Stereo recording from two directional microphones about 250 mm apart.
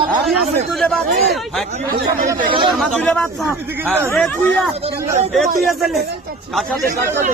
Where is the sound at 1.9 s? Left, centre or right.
Right.